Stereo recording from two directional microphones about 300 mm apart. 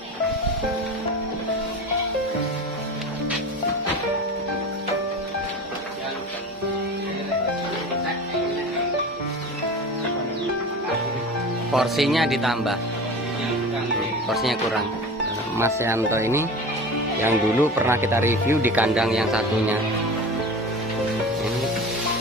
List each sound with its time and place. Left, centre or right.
11.7 s speech: centre
14.3 s speech: centre